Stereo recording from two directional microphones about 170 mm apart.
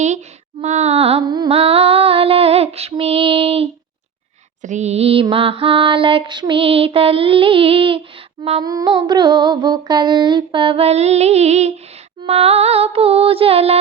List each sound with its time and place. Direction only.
0.6 s mantra: 40° right (ahead or behind)
1.4 s female singing: 35° right (ahead or behind)
2.9 s mantra: 35° right (ahead or behind)
8.6 s a sound: 25° right (ahead or behind); by 11.7 s 40° right (ahead or behind)
12.2 s mantra: 35° right (ahead or behind)